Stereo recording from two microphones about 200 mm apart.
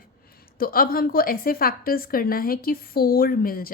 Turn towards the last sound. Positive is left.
turn(degrees=45)  # may be behind; listen again after turning